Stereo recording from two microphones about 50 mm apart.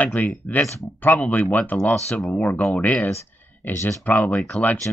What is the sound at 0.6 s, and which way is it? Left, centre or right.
Speech, left.